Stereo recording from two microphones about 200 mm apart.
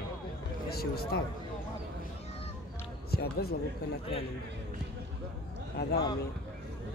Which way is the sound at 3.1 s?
50° left (ahead or behind).